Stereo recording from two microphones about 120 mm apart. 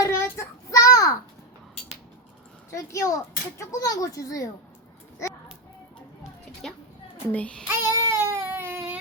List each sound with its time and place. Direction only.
0.0 s a sound: 25° left (ahead or behind)
2.6 s a woman's voice: 25° left (ahead or behind)
7.3 s a child's voice: 10° left (ahead or behind)
7.7 s baby cry: 25° right (ahead or behind)